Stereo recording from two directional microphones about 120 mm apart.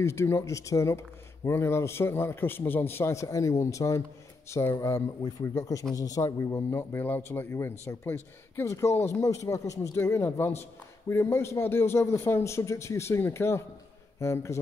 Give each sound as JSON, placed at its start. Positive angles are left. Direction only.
{"t": 0.0, "sound": "speech", "side_deg": 20}